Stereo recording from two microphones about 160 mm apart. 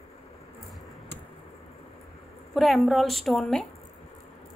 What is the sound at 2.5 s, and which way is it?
A woman's voice, centre (ahead or behind).